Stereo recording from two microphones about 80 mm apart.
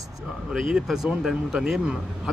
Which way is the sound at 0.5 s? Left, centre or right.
Centre.